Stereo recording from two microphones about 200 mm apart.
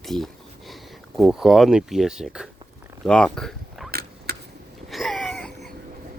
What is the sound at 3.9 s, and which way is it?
Vehicle, 50° right (ahead or behind).